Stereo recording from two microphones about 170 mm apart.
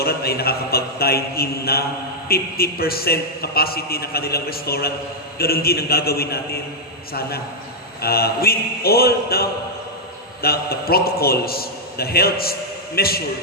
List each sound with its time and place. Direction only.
0.0 s a man's voice: 65° left (ahead or behind)